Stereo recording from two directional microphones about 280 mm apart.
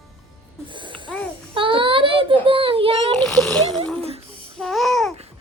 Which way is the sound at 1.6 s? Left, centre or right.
Centre.